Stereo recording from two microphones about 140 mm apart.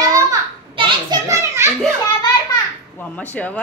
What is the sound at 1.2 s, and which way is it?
Speech, 20° right (ahead or behind).